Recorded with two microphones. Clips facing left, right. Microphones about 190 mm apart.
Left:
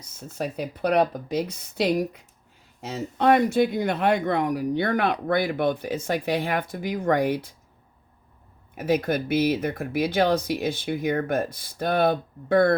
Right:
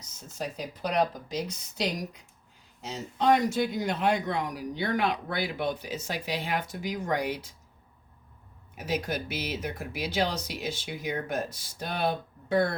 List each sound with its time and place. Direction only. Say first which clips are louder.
0.2 s speech: left 6 dB; 60° left (ahead or behind)
8.7 s speech: left 8 dB; 55° left (ahead or behind)